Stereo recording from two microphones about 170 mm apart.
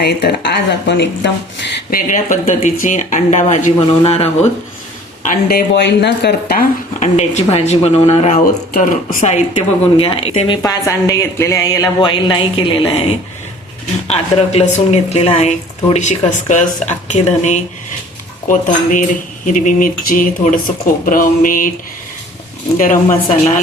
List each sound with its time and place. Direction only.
0.0 s speech: 75° left (ahead or behind)
1.9 s speech: 50° left (ahead or behind)
5.2 s speech: 60° left (ahead or behind)
7.0 s speech: 40° left (ahead or behind)
8.7 s speech: 60° left (ahead or behind)
10.0 s speech: 35° left (ahead or behind)
10.6 s speech: 20° left (ahead or behind)
14.1 s speech: 35° left (ahead or behind); by 21.7 s 55° left (ahead or behind)
22.8 s speech: 50° left (ahead or behind)